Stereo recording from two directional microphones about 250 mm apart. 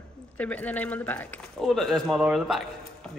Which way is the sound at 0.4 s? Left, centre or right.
Centre.